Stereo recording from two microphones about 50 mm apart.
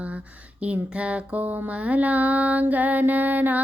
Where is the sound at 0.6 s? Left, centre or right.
Right.